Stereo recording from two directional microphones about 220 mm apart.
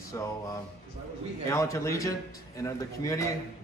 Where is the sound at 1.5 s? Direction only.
15° left (ahead or behind).